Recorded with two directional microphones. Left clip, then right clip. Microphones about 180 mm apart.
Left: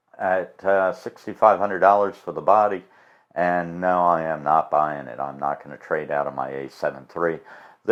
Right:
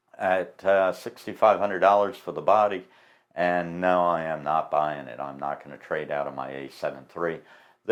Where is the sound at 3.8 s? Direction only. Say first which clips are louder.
Left 3 dB; 25° left (ahead or behind).